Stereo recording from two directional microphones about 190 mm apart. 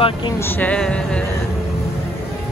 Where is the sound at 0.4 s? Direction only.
10° left (ahead or behind).